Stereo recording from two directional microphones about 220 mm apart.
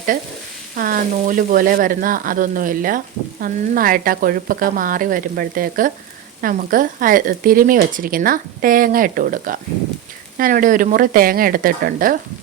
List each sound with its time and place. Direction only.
0.8 s speech: 40° right (ahead or behind)